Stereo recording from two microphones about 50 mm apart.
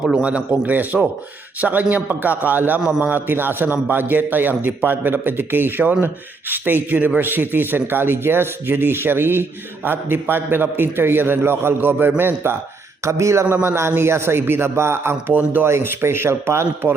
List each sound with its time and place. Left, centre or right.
0.2 s a man's voice: right
13.1 s a man's voice: right
13.5 s speech: right
13.9 s a man's voice: right
15.3 s a man's voice: right
15.6 s a man's voice: right